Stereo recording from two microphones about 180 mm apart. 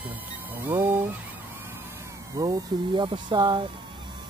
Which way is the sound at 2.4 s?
20° right (ahead or behind).